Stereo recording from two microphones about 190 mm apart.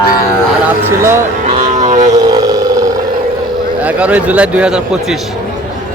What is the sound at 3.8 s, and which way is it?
Speech, 5° right (ahead or behind).